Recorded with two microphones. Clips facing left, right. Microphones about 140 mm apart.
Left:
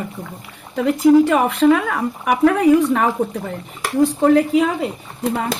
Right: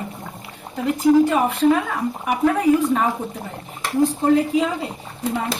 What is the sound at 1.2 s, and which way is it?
Speech, 75° left (ahead or behind).